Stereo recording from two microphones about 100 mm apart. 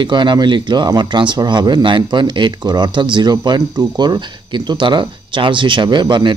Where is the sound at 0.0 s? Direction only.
50° right (ahead or behind).